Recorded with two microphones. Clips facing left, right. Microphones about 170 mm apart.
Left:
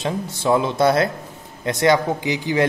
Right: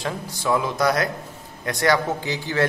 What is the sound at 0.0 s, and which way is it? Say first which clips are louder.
A man's voice: left 4 dB; 25° left (ahead or behind).